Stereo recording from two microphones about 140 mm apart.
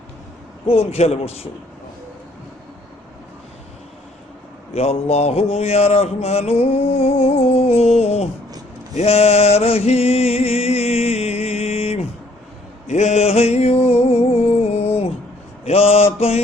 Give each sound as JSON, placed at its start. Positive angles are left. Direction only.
{"t": 0.7, "sound": "mantra", "side_deg": 45}
{"t": 4.7, "sound": "mantra", "side_deg": 50}
{"t": 7.8, "sound": "a sound", "side_deg": 50}
{"t": 9.0, "sound": "music", "side_deg": 50}
{"t": 12.9, "sound": "a sound", "side_deg": 55}
{"t": 15.6, "sound": "mantra", "side_deg": 45}